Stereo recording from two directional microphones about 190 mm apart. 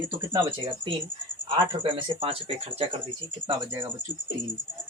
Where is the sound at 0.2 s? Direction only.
25° right (ahead or behind).